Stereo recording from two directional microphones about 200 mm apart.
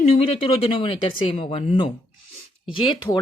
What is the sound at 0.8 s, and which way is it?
Speech, 25° left (ahead or behind).